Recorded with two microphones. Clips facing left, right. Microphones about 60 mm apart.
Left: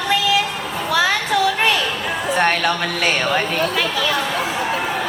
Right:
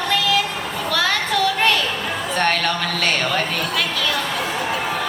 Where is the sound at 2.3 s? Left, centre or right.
Centre.